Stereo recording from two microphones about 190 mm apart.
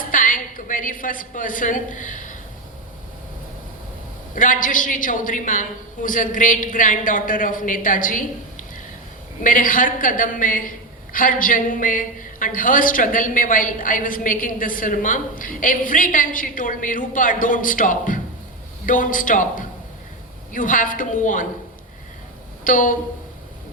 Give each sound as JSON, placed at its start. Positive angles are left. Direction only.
{"t": 0.0, "sound": "a sound", "side_deg": 45}
{"t": 4.4, "sound": "a woman's voice", "side_deg": 45}
{"t": 22.6, "sound": "a woman's voice", "side_deg": 45}